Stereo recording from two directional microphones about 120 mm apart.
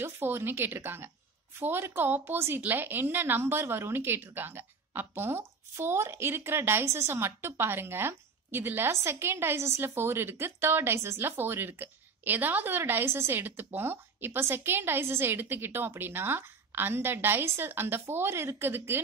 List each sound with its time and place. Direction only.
0.0 s a woman's voice: 20° right (ahead or behind)